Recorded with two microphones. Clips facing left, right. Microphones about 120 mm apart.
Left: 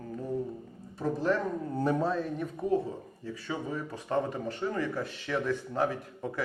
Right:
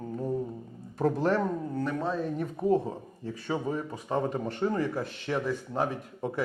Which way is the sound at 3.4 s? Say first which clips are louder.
Right 4 dB; 35° right (ahead or behind).